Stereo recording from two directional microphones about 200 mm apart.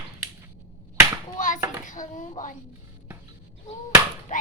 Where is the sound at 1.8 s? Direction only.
40° left (ahead or behind).